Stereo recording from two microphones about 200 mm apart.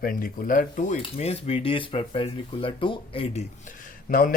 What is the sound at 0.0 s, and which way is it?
Speech, 45° left (ahead or behind).